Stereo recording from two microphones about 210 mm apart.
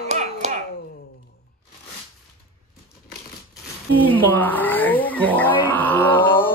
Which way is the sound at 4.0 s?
10° left (ahead or behind).